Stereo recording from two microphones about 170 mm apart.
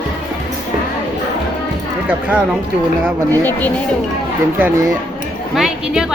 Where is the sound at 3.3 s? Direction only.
10° left (ahead or behind).